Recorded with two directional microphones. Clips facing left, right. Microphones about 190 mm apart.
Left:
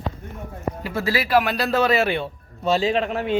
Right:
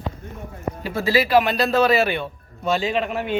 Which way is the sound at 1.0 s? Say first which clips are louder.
Right 3 dB; 25° right (ahead or behind).